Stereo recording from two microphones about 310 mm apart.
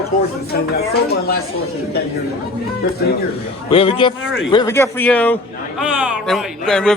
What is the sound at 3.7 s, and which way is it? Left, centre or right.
A man's voice, centre.